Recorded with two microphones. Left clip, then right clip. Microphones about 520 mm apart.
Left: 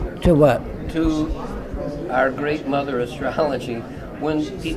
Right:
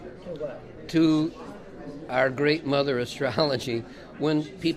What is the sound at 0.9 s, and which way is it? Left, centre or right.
Speech, right.